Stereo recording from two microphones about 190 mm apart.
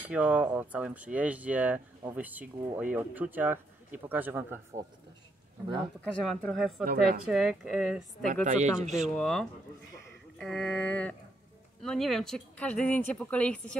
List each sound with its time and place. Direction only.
0.1 s speech: 5° right (ahead or behind)
6.0 s speech: centre (ahead or behind)
6.8 s a woman's voice: 50° right (ahead or behind)
7.2 s speech: centre (ahead or behind)
8.5 s speech: 40° right (ahead or behind)
8.9 s speech: centre (ahead or behind)
10.4 s a sound: 5° left (ahead or behind)
11.8 s speech: centre (ahead or behind)